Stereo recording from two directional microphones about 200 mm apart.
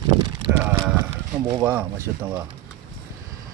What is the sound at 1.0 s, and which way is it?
Speech, 15° right (ahead or behind).